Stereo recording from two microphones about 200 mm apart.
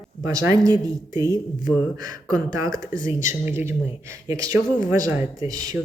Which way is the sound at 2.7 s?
40° left (ahead or behind).